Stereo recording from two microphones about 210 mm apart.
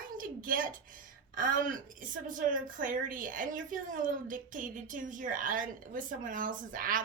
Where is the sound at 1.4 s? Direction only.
40° right (ahead or behind).